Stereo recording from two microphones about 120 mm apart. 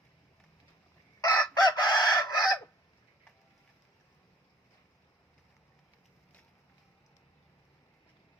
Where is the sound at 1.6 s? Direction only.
35° left (ahead or behind).